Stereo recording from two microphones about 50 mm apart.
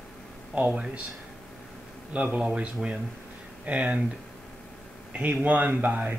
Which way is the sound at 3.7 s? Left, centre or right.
Right.